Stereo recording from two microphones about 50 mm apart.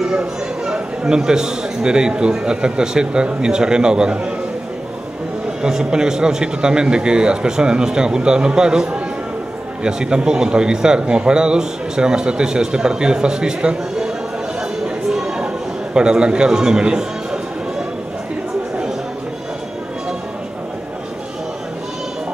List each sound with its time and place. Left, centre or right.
0.1 s speech: centre
5.6 s speech: centre
15.1 s a sound: centre